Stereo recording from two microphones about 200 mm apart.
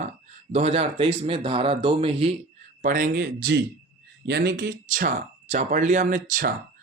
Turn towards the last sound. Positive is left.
turn(degrees=-45)  # may be behind; listen again after turning